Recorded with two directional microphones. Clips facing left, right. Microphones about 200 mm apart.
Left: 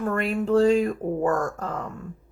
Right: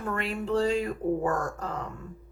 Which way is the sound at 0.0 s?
50° left (ahead or behind).